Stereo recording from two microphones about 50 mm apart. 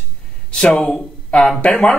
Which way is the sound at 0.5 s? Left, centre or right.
Centre.